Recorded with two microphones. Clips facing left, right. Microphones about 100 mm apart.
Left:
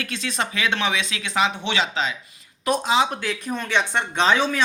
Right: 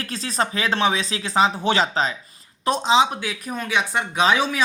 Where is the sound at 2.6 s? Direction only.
25° right (ahead or behind).